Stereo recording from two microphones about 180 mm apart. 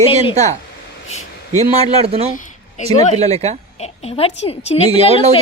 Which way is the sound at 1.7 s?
35° right (ahead or behind).